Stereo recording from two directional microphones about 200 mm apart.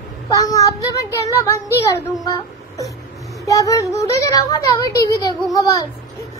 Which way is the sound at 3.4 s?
15° left (ahead or behind).